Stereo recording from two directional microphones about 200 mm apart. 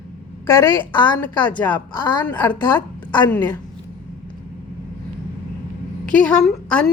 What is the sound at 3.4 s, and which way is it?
Speech, 20° left (ahead or behind).